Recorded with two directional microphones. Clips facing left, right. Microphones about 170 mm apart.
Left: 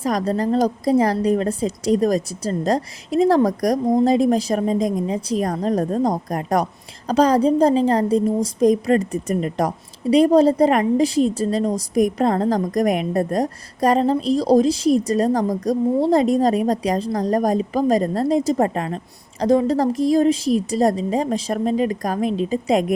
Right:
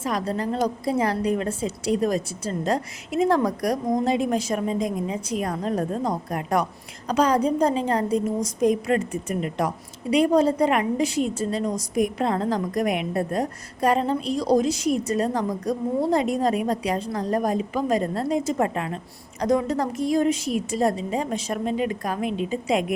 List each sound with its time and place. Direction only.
0.0 s a woman's voice: 40° left (ahead or behind)